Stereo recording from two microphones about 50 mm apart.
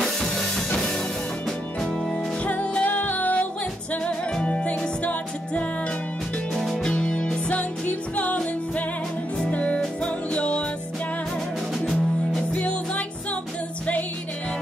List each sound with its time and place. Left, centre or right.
0.0 s music: centre
1.8 s music: centre
2.4 s music: left
6.5 s music: centre
6.8 s music: centre
9.5 s music: left
12.4 s music: left